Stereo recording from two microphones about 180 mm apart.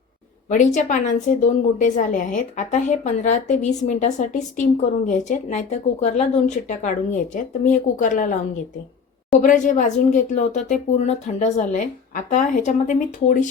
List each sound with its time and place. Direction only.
0.4 s a woman's voice: 45° left (ahead or behind)
9.4 s a woman's voice: 45° left (ahead or behind)